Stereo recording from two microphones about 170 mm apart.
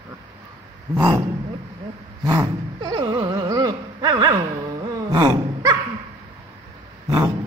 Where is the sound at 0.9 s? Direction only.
25° right (ahead or behind).